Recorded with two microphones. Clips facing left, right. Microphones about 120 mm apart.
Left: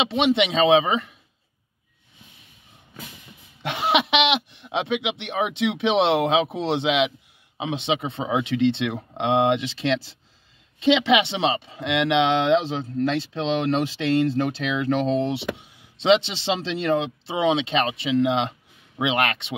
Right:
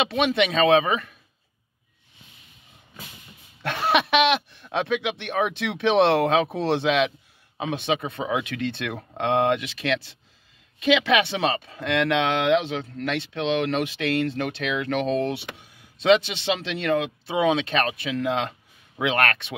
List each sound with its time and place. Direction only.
0.0 s speech: 25° left (ahead or behind)
3.6 s speech: 15° left (ahead or behind)